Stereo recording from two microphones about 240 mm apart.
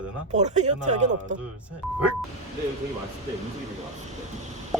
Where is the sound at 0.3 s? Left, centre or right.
Right.